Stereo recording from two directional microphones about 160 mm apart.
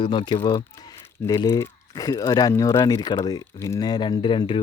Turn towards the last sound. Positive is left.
turn(degrees=30)  # may be behind; listen again after turning